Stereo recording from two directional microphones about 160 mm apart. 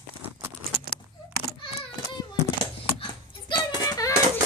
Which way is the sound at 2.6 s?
30° left (ahead or behind).